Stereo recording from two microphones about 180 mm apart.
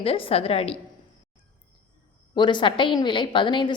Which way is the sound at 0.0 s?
30° left (ahead or behind).